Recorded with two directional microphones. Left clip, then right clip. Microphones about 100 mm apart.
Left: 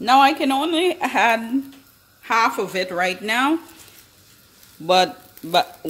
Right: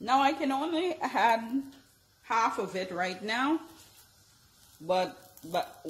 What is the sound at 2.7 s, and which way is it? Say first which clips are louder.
Speech: left 11 dB; 70° left (ahead or behind).